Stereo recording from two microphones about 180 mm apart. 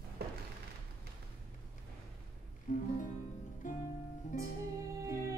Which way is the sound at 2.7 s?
45° left (ahead or behind).